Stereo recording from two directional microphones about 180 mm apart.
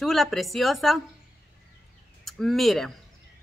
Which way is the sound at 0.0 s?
Centre (ahead or behind).